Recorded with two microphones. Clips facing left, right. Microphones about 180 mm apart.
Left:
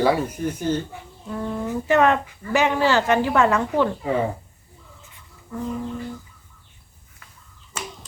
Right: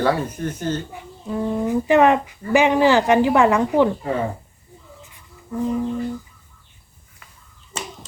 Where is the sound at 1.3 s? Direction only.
15° right (ahead or behind).